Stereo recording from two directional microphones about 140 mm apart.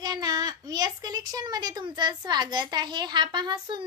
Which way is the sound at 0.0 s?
30° right (ahead or behind).